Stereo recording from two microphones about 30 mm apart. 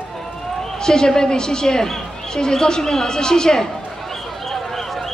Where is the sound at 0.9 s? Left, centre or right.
Left.